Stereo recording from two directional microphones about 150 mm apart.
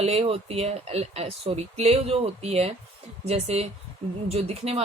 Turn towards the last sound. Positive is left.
turn(degrees=-45)  # may be behind; listen again after turning